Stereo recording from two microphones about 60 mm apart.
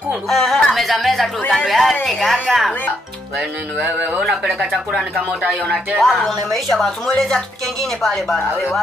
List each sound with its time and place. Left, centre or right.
0.3 s a sound: centre
1.7 s speech: centre
3.8 s speech: right
4.2 s speech: centre
5.9 s speech: centre
8.0 s speech: centre